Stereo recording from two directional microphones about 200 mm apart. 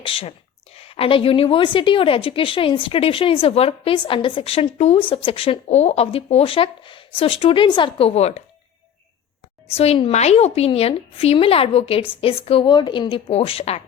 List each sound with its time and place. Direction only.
0.0 s a woman's voice: 25° left (ahead or behind)
9.6 s a woman's voice: 30° left (ahead or behind)